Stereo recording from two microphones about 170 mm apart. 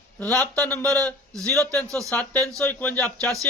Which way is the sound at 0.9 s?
20° right (ahead or behind).